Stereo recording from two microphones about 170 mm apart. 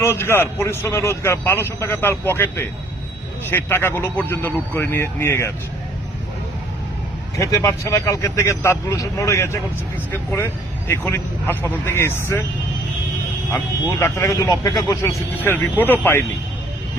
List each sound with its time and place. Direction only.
0.0 s speech: 15° left (ahead or behind)
7.3 s speech: 20° left (ahead or behind)
14.0 s speech: 15° left (ahead or behind)